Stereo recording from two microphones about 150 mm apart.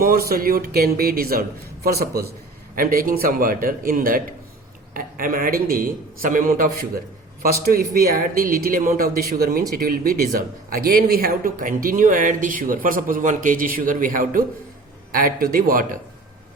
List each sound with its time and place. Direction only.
0.0 s a man's voice: 85° right
2.7 s speech: 70° right (ahead or behind)